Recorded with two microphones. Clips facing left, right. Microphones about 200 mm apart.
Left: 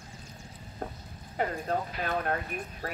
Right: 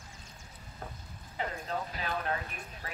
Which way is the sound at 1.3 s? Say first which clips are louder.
Left 6 dB; 50° left (ahead or behind).